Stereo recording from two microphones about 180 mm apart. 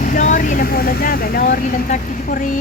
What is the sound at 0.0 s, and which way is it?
Speech, 45° left (ahead or behind).